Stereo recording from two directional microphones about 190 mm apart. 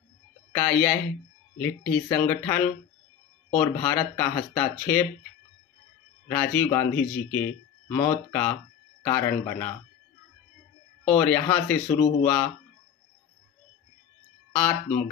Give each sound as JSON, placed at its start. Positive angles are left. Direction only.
{"t": 0.5, "sound": "speech", "side_deg": 10}
{"t": 6.2, "sound": "speech", "side_deg": 10}
{"t": 11.1, "sound": "speech", "side_deg": 10}
{"t": 14.5, "sound": "speech", "side_deg": 10}